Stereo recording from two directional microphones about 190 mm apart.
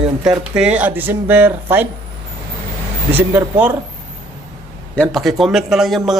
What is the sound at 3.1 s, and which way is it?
Speech, 10° right (ahead or behind).